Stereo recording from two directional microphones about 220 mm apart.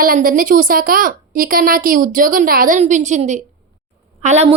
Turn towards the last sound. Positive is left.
turn(degrees=-30)  # may be behind; listen again after turning